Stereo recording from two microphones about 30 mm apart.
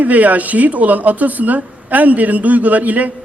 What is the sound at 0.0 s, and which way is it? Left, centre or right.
A man's voice, right.